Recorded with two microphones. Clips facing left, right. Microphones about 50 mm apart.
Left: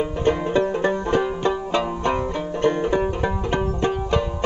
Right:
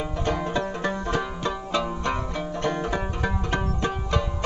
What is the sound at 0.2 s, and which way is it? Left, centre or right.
Banjo, left.